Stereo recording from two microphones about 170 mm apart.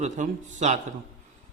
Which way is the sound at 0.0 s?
45° right (ahead or behind).